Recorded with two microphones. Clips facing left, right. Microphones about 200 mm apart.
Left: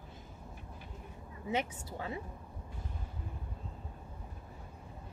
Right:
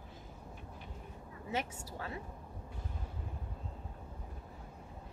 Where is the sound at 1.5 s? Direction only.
20° left (ahead or behind).